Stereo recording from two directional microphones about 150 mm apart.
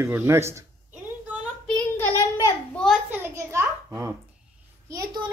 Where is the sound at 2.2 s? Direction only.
20° left (ahead or behind).